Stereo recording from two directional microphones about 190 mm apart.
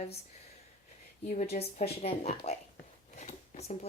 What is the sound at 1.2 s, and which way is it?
Speech, 40° left (ahead or behind).